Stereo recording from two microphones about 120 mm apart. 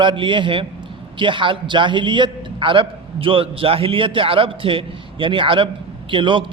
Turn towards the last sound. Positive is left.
turn(degrees=-45)  # may be behind; listen again after turning